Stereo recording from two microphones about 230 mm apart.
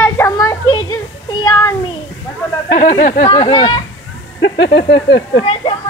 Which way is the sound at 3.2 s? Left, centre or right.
Centre.